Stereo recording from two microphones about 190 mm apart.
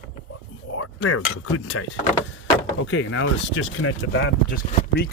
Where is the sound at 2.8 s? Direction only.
80° left.